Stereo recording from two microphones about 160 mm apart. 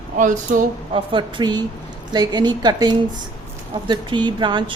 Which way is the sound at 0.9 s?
30° right (ahead or behind).